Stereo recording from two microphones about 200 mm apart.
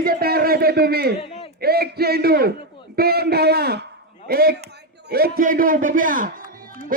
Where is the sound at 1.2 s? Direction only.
25° left (ahead or behind).